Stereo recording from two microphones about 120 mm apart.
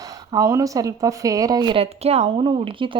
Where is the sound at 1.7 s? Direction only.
60° right (ahead or behind).